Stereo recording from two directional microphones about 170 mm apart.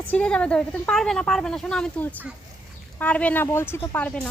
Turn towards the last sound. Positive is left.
turn(degrees=10)  # may be behind; listen again after turning